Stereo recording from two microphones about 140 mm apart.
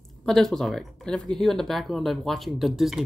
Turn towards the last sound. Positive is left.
turn(degrees=0)  # may be behind; listen again after turning